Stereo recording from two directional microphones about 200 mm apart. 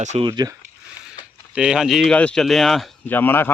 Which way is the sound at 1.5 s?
5° right (ahead or behind).